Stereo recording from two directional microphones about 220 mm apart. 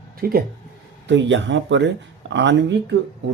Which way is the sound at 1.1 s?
55° right (ahead or behind).